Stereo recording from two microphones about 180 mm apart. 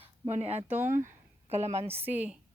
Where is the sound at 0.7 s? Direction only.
10° right (ahead or behind).